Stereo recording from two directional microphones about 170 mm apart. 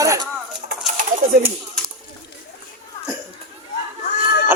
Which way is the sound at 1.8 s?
Centre (ahead or behind).